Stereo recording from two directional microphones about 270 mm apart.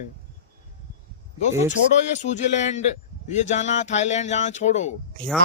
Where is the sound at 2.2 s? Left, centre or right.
Left.